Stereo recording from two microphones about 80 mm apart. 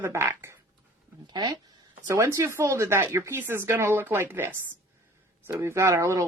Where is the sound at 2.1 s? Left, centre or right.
Right.